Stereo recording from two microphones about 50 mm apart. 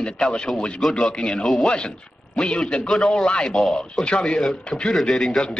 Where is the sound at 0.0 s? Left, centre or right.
Centre.